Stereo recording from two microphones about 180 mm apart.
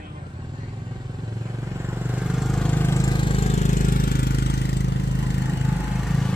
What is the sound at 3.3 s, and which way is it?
Vehicle, 35° left (ahead or behind).